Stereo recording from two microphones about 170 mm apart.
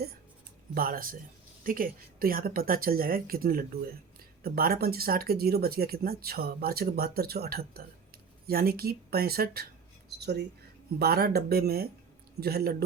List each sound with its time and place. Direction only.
0.7 s speech: 60° right (ahead or behind)